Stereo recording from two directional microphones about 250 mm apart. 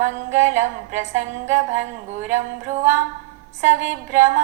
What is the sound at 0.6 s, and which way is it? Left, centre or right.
Music, right.